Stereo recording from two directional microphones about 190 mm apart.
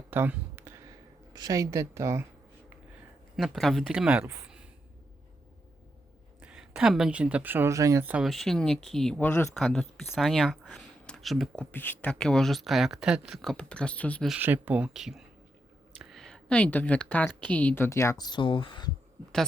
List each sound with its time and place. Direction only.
0.1 s a sound: 10° right (ahead or behind)
1.3 s a woman's voice: 20° right (ahead or behind)
3.3 s speech: centre (ahead or behind)
6.4 s speech: 5° right (ahead or behind)
14.3 s a woman's voice: 10° right (ahead or behind); by 18.9 s 25° left (ahead or behind)